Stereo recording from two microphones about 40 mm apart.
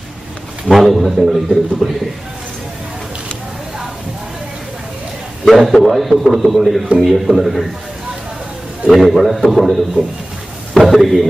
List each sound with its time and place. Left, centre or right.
0.7 s a man's voice: centre
5.5 s a man's voice: centre
8.8 s a man's voice: centre
10.0 s speech: right
10.7 s a man's voice: centre